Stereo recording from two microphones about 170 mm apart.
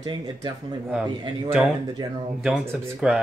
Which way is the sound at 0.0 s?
25° right (ahead or behind).